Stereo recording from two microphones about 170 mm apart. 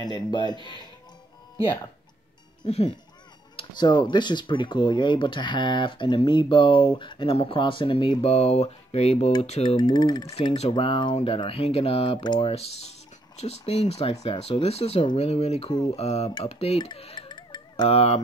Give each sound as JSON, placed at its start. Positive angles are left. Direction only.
{"t": 0.0, "sound": "speech", "side_deg": 25}
{"t": 2.6, "sound": "speech", "side_deg": 40}
{"t": 3.5, "sound": "speech", "side_deg": 25}
{"t": 9.8, "sound": "speech", "side_deg": 25}
{"t": 10.3, "sound": "speech", "side_deg": 35}